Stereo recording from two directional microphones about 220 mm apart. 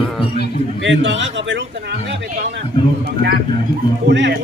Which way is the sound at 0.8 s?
55° right (ahead or behind).